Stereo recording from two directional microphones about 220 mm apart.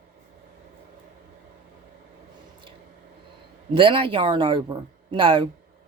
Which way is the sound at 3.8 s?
25° right (ahead or behind).